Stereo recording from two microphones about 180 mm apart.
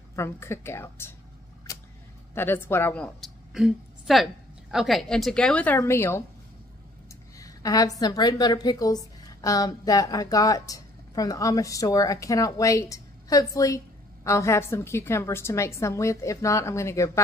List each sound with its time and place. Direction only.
0.1 s speech: 15° left (ahead or behind)
1.7 s vehicle: 20° left (ahead or behind)
2.3 s a woman's voice: 10° left (ahead or behind)
7.3 s a woman's voice: 20° left (ahead or behind)